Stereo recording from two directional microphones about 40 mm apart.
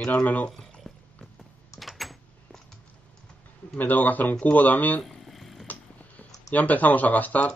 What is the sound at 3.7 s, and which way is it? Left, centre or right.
Speech, left.